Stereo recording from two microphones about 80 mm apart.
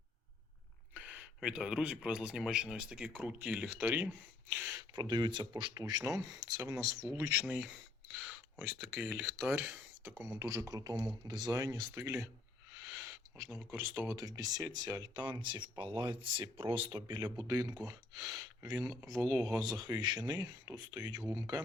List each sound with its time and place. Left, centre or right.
0.9 s a sound: centre
1.4 s speech: centre
4.9 s speech: right
5.7 s speech: right
7.4 s speech: centre
9.2 s speech: right
10.2 s speech: right
11.9 s speech: right
12.9 s owl: right
13.7 s speech: right
14.2 s speech: right
17.4 s speech: right